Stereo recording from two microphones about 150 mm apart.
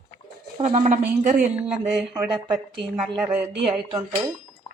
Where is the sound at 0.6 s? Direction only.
50° right (ahead or behind).